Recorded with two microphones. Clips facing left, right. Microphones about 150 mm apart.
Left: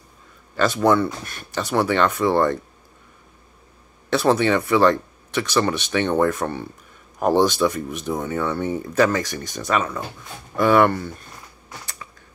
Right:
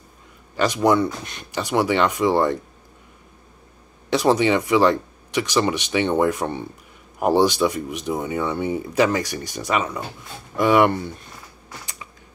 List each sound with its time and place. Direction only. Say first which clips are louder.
0.6 s speech: even; 15° right (ahead or behind)
4.1 s speech: even; 15° right (ahead or behind)
11.8 s computer keyboard: even; 15° right (ahead or behind)